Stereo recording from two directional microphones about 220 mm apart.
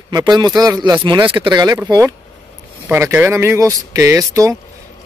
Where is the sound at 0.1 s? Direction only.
20° right (ahead or behind).